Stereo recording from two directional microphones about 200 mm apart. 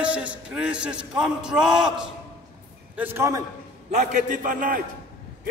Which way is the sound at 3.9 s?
40° right (ahead or behind).